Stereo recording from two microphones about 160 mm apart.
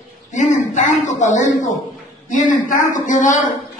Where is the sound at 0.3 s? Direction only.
50° left (ahead or behind).